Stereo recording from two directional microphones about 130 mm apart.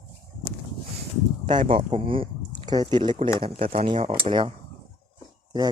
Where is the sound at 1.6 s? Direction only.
45° right (ahead or behind).